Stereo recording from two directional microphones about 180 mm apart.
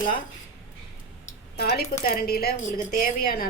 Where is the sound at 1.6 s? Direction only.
65° left (ahead or behind).